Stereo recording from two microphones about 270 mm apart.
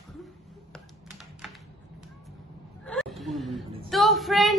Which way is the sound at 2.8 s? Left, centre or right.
Centre.